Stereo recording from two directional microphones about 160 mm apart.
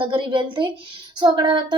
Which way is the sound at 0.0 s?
30° right (ahead or behind).